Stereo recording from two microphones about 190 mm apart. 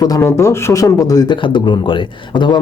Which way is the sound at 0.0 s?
15° left (ahead or behind).